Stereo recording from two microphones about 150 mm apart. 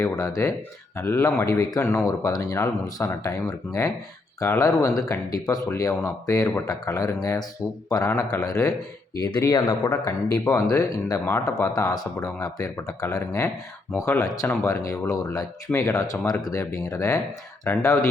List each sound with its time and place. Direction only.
0.0 s speech: 20° left (ahead or behind)